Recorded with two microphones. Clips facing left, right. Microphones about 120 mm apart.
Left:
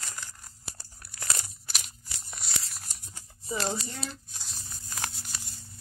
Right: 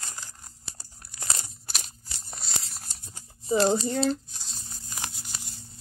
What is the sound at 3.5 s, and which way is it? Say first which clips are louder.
Speech: right 10 dB; 30° right (ahead or behind).